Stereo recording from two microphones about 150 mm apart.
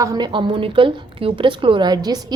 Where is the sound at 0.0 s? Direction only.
25° right (ahead or behind).